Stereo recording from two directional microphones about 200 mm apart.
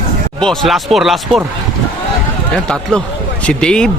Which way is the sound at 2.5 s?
5° left (ahead or behind).